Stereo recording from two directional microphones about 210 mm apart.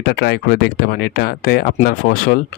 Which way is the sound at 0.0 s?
50° left (ahead or behind).